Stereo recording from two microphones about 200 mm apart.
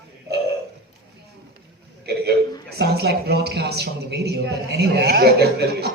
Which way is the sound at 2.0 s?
55° right (ahead or behind).